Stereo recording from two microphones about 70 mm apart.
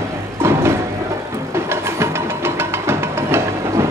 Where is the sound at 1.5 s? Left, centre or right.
Right.